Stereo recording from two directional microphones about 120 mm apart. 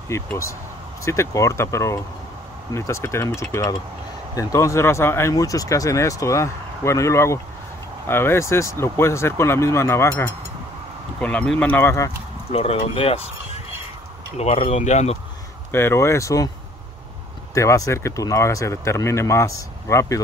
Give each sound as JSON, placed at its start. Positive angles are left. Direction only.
{"t": 0.1, "sound": "speech", "side_deg": 25}
{"t": 11.1, "sound": "speech", "side_deg": 10}
{"t": 12.5, "sound": "speech", "side_deg": 55}
{"t": 15.7, "sound": "speech", "side_deg": 20}
{"t": 17.6, "sound": "speech", "side_deg": 25}